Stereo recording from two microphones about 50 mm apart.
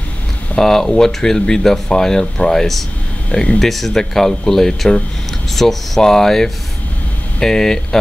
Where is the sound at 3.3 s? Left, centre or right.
Left.